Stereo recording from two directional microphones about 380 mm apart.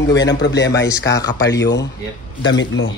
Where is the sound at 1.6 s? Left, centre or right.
Left.